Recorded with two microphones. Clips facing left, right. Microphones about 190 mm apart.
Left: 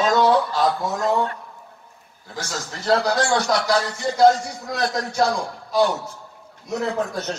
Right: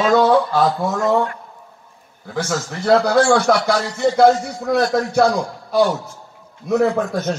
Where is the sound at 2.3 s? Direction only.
55° right (ahead or behind).